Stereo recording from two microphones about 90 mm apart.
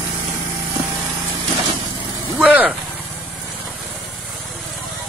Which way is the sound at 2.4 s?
15° right (ahead or behind).